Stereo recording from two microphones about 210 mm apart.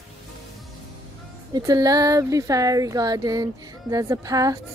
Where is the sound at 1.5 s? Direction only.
15° right (ahead or behind).